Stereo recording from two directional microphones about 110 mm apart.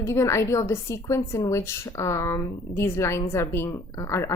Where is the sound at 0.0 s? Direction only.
25° left (ahead or behind).